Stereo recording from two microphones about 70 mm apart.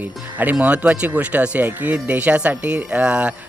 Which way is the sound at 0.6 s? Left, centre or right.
Centre.